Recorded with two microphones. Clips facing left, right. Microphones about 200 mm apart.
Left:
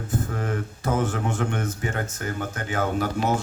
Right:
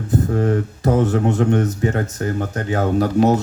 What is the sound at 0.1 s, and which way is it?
Speech, 35° right (ahead or behind).